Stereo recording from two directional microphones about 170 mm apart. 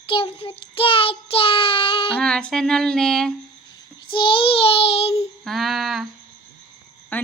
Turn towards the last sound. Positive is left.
turn(degrees=10)  # may be behind; listen again after turning